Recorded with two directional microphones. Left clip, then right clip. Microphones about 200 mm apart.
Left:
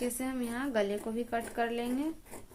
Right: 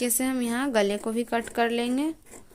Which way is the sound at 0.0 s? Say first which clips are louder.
Right 8 dB; 55° right (ahead or behind).